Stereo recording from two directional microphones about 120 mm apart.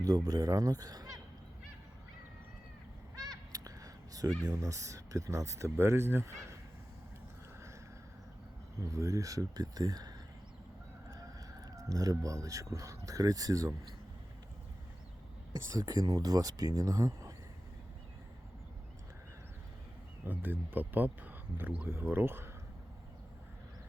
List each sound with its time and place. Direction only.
0.0 s speech: 30° right (ahead or behind)
3.2 s a sound: 30° right (ahead or behind)
4.4 s speech: 30° right (ahead or behind)
8.9 s speech: 25° right (ahead or behind)
11.1 s speech: 30° right (ahead or behind)
15.7 s speech: 30° right (ahead or behind)
20.2 s speech: 15° right (ahead or behind)